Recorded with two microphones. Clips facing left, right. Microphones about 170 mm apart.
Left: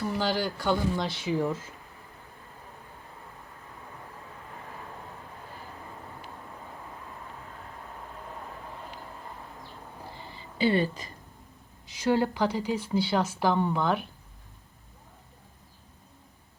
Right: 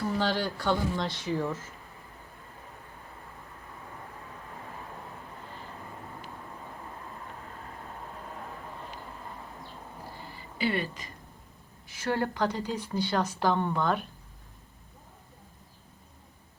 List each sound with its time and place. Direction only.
0.1 s a woman's voice: 5° left (ahead or behind)
10.6 s a woman's voice: 30° left (ahead or behind)
11.9 s a woman's voice: 15° left (ahead or behind)